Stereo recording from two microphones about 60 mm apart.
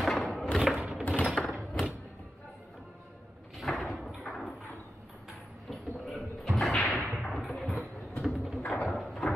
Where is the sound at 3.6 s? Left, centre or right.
Centre.